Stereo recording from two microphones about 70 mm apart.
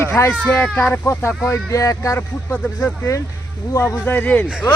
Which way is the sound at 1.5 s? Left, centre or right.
Left.